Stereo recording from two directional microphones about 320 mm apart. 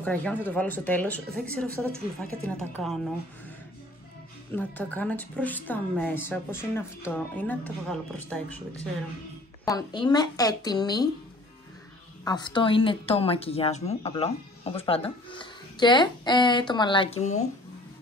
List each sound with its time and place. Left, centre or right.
0.0 s a woman's voice: centre
4.6 s a woman's voice: centre
9.7 s speech: centre
12.3 s speech: centre